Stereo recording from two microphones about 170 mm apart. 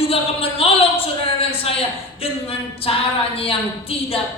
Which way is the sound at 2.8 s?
35° left (ahead or behind).